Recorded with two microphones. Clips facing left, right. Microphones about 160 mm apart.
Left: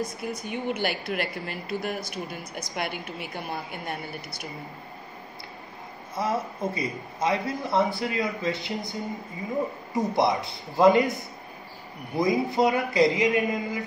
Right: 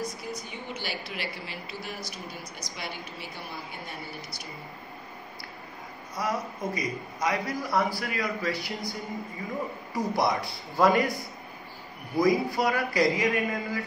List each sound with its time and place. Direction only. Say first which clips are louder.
0.0 s a woman's voice: left 4 dB; 55° left (ahead or behind)
6.1 s a man's voice: left 3 dB; 25° left (ahead or behind)
9.9 s a man's voice: left 3 dB; 20° left (ahead or behind)
12.2 s a man's voice: left 1 dB; 20° left (ahead or behind)